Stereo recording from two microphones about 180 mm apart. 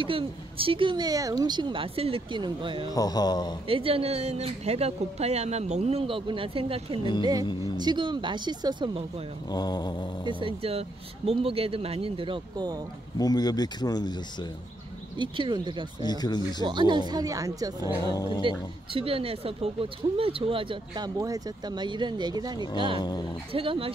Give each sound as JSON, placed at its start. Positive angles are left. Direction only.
{"t": 0.0, "sound": "speech", "side_deg": -30}
{"t": 2.9, "sound": "speech", "side_deg": 20}
{"t": 3.6, "sound": "speech", "side_deg": -30}
{"t": 9.5, "sound": "speech", "side_deg": 20}
{"t": 10.2, "sound": "speech", "side_deg": -30}
{"t": 13.2, "sound": "speech", "side_deg": 20}
{"t": 15.1, "sound": "speech", "side_deg": -25}
{"t": 16.0, "sound": "speech", "side_deg": 25}
{"t": 16.6, "sound": "speech", "side_deg": -25}
{"t": 17.7, "sound": "speech", "side_deg": 20}
{"t": 18.9, "sound": "speech", "side_deg": -30}
{"t": 22.9, "sound": "speech", "side_deg": 25}
{"t": 23.5, "sound": "speech", "side_deg": -30}